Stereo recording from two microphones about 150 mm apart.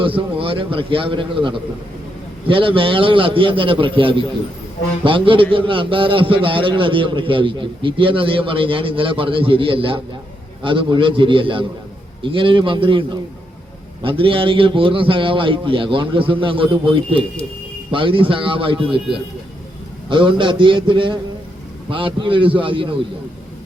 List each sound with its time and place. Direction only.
0.0 s a man's voice: 35° right (ahead or behind)
20.1 s a man's voice: 35° right (ahead or behind)